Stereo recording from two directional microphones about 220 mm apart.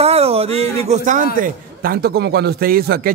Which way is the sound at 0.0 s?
30° right (ahead or behind).